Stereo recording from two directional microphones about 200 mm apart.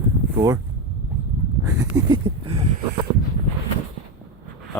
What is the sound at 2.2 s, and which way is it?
Speech, 25° right (ahead or behind).